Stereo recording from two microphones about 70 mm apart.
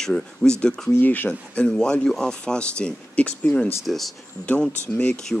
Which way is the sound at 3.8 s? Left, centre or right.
Centre.